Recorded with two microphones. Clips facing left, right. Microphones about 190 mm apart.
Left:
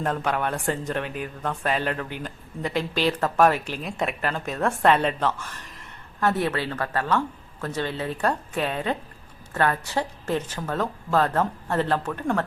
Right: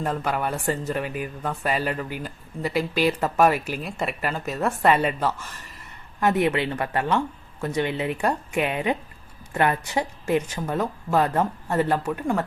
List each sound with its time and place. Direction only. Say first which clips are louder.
0.0 s speech: even; 5° right (ahead or behind)